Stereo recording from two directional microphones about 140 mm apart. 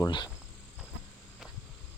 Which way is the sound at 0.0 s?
30° left (ahead or behind).